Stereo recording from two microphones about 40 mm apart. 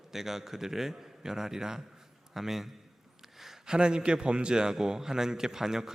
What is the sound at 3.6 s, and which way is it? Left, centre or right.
A man's voice, right.